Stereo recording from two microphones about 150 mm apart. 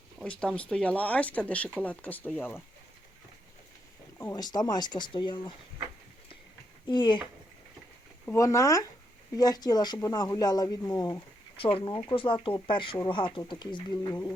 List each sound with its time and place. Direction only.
0.3 s speech: 5° left (ahead or behind)
4.2 s speech: 25° left (ahead or behind)
6.8 s speech: 30° left (ahead or behind)
8.2 s speech: 15° left (ahead or behind)
11.6 s speech: 35° left (ahead or behind)
14.1 s speech: 20° left (ahead or behind)